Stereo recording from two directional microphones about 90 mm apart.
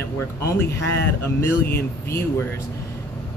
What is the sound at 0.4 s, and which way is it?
Speech, 30° left (ahead or behind).